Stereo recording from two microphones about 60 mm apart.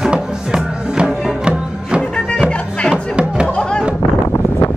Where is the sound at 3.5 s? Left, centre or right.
Centre.